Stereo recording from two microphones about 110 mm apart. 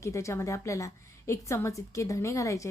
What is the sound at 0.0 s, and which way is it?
A woman's voice, 25° left (ahead or behind).